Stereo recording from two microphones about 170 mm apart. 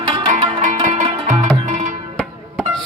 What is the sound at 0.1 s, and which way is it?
Music, 35° right (ahead or behind).